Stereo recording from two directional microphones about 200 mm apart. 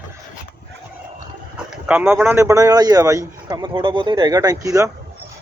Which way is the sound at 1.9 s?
10° right (ahead or behind).